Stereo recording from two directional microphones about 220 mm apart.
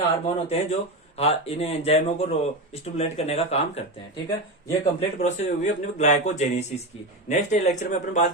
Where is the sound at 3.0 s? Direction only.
30° left (ahead or behind).